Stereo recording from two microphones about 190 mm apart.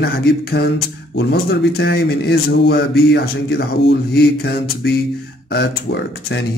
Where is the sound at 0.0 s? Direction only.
60° left (ahead or behind).